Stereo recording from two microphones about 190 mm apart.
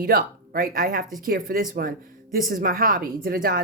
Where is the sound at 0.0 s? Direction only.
50° right (ahead or behind).